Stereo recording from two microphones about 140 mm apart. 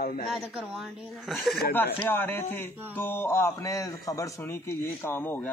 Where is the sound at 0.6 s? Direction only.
5° right (ahead or behind).